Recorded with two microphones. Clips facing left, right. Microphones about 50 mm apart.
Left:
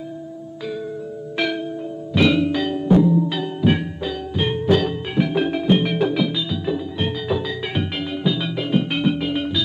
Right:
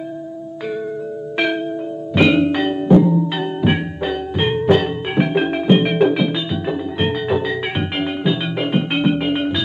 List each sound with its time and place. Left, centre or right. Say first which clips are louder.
1.3 s music: right 3 dB; right